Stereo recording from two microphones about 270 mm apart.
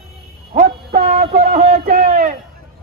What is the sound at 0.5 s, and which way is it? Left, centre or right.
Speech, right.